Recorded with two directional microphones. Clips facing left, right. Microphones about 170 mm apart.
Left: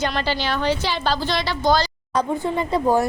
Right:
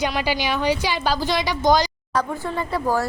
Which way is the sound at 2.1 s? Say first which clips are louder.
Left 4 dB; 20° left (ahead or behind).